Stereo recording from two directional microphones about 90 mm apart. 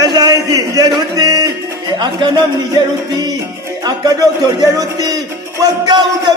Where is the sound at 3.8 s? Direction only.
45° right (ahead or behind).